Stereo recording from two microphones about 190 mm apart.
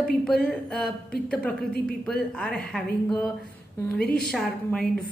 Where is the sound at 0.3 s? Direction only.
5° left (ahead or behind).